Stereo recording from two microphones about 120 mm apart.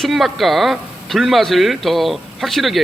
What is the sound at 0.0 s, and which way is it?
Speech, centre (ahead or behind).